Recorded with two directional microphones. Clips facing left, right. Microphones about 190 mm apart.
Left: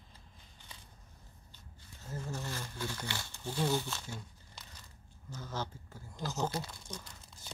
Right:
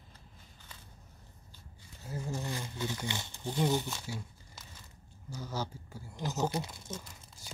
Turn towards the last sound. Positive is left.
turn(degrees=-5)  # may be behind; listen again after turning